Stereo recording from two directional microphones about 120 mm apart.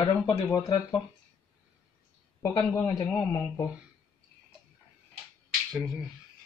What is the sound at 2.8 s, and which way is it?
Speech, 30° left (ahead or behind).